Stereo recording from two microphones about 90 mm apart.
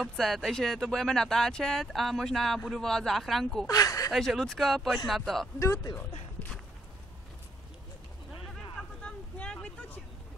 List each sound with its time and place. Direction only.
0.0 s speech: centre (ahead or behind)
3.6 s speech: 40° left (ahead or behind)
4.1 s speech: centre (ahead or behind)
8.7 s vehicle: 10° left (ahead or behind)